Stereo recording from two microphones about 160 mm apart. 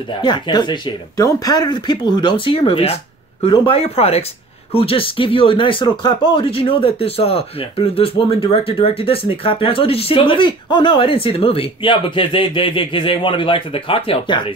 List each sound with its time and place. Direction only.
0.2 s speech: 30° left (ahead or behind)